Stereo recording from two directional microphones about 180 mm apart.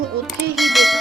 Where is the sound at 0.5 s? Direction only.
Centre (ahead or behind).